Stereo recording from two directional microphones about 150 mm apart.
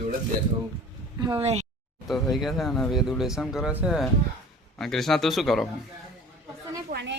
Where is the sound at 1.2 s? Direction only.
40° right (ahead or behind).